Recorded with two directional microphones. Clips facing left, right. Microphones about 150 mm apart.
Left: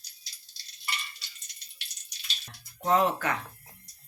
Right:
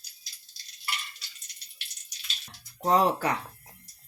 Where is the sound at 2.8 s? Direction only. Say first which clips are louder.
Right 1 dB; 35° right (ahead or behind).